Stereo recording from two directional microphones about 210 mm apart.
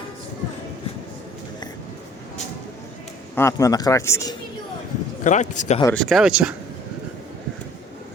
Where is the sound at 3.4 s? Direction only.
15° left (ahead or behind).